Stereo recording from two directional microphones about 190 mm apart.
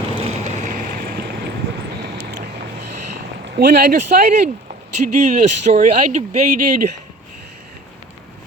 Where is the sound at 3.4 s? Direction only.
55° right (ahead or behind).